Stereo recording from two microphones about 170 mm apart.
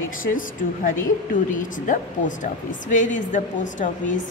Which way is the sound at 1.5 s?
50° left (ahead or behind).